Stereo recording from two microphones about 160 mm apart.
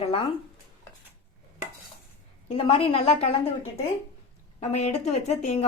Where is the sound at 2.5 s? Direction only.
35° left (ahead or behind).